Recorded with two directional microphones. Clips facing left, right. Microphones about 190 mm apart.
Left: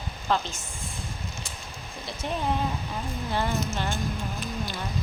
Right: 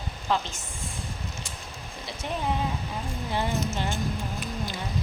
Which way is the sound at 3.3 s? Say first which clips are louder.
Even; 15° right (ahead or behind).